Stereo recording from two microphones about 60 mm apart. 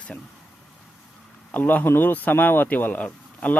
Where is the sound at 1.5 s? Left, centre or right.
Left.